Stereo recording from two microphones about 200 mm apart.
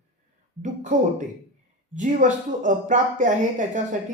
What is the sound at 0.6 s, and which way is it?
Speech, 35° right (ahead or behind).